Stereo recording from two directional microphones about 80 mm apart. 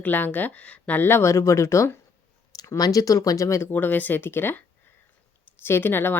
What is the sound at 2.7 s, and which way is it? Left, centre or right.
Speech, left.